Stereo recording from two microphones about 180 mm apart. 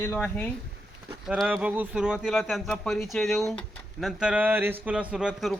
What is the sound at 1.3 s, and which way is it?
A man's voice, 10° right (ahead or behind).